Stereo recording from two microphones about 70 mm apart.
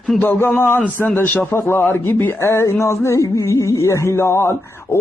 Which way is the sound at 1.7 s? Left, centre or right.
Left.